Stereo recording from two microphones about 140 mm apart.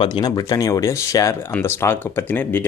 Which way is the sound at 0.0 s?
30° left (ahead or behind).